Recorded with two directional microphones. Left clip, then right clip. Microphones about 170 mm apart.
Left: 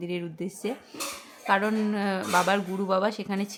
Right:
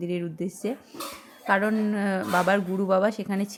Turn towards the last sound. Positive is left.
turn(degrees=-15)  # may be behind; listen again after turning